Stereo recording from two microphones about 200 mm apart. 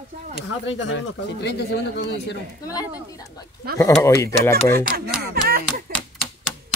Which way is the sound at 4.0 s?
15° left (ahead or behind).